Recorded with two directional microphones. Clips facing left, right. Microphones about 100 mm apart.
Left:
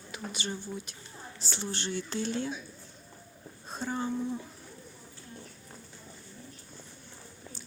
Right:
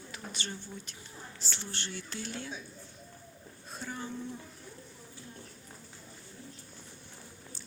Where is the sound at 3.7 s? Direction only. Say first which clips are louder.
Left 7 dB; 30° left (ahead or behind).